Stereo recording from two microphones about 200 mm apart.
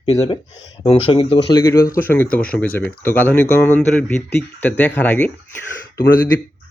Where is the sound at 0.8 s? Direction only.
25° left (ahead or behind); by 5.3 s 5° left (ahead or behind).